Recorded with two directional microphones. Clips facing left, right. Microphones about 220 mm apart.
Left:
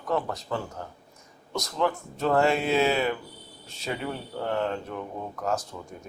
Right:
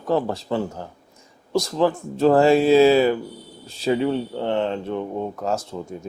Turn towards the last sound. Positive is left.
turn(degrees=-25)  # may be behind; listen again after turning